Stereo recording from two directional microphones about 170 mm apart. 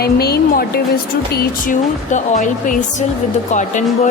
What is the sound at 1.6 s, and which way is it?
Speech, 50° left (ahead or behind).